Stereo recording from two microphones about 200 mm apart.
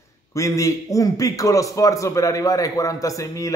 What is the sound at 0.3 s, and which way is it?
A man's voice, 15° left (ahead or behind).